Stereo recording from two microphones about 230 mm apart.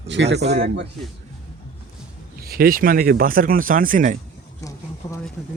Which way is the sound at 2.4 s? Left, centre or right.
Right.